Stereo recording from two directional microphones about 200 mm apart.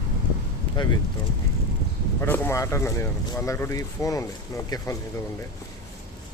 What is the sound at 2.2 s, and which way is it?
Speech, 10° left (ahead or behind).